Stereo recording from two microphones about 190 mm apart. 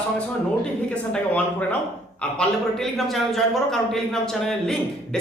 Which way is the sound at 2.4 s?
Centre (ahead or behind).